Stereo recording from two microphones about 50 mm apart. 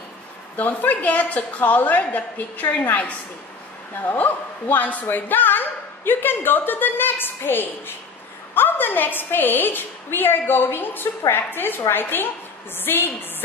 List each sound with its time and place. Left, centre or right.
0.6 s a woman's voice: left